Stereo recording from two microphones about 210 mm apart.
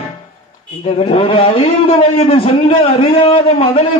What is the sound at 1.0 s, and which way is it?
A man's voice, 25° left (ahead or behind).